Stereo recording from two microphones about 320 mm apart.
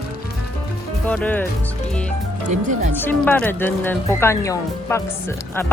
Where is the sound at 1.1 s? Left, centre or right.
Centre.